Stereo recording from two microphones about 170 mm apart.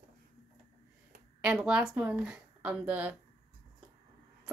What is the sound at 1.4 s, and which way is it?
Speech, 5° right (ahead or behind).